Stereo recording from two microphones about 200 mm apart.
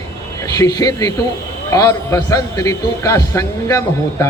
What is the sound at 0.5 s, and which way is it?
A man's voice, 20° left (ahead or behind).